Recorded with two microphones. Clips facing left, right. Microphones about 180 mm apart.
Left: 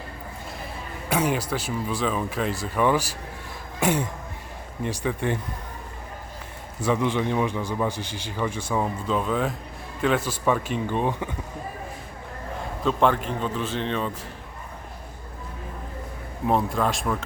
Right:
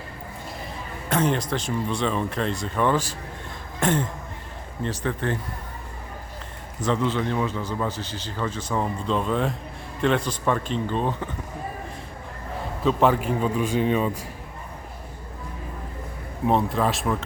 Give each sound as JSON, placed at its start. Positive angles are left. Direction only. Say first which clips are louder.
{"t": 1.1, "sound": "speech", "louder": "right 1 dB", "side_deg": 10}
{"t": 6.8, "sound": "speech", "louder": "left 1 dB", "side_deg": 15}
{"t": 12.8, "sound": "a man's voice", "louder": "right 2 dB", "side_deg": 0}
{"t": 16.5, "sound": "speech", "louder": "right 1 dB", "side_deg": 0}